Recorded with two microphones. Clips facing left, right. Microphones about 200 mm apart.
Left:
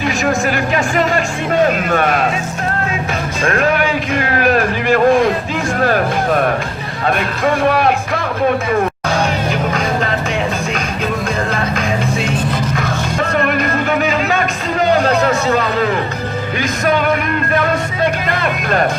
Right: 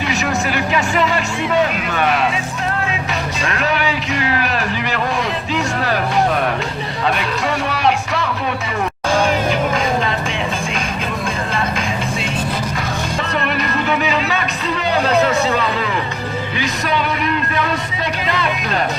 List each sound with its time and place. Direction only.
0.3 s music: 45° left (ahead or behind)
3.4 s a sound: 45° left (ahead or behind)
7.4 s music: 45° left (ahead or behind)
13.3 s music: 50° left (ahead or behind)